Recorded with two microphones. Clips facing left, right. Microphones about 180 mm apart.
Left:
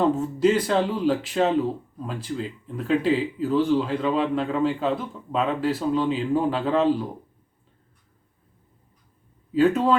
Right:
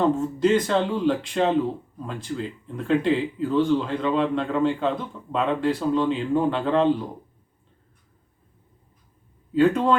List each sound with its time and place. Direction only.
0.2 s speech: 10° left (ahead or behind)
9.5 s speech: 5° left (ahead or behind)